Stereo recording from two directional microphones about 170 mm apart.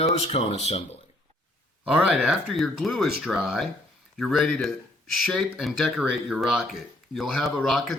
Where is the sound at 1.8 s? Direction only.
5° right (ahead or behind).